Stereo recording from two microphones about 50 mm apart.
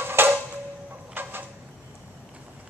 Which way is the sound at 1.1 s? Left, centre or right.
Right.